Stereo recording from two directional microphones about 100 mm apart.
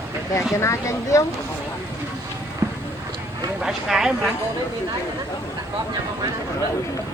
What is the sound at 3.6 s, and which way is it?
Speech, 5° right (ahead or behind).